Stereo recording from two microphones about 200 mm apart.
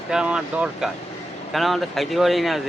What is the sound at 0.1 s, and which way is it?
Speech, 5° right (ahead or behind).